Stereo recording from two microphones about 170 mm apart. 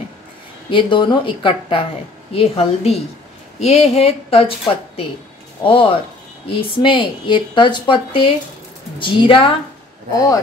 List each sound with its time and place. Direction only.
0.7 s speech: 30° left (ahead or behind)
5.6 s speech: 30° left (ahead or behind)